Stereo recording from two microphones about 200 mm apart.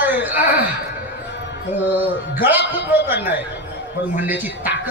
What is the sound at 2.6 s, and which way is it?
Speech, 60° left (ahead or behind).